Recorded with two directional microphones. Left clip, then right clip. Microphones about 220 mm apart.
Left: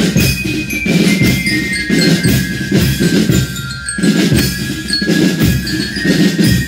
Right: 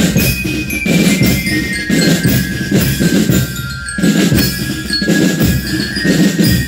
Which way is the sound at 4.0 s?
30° right (ahead or behind).